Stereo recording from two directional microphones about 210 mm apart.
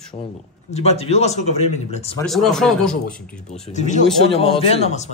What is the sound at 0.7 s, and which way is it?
Speech, 30° left (ahead or behind).